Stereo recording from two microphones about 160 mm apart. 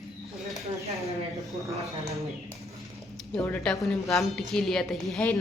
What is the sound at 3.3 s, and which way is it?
A woman's voice, 10° left (ahead or behind).